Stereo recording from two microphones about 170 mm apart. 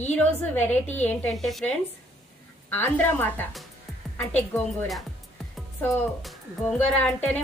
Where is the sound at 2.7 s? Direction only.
10° left (ahead or behind).